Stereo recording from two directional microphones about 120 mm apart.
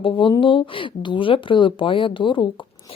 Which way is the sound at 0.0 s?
45° left (ahead or behind).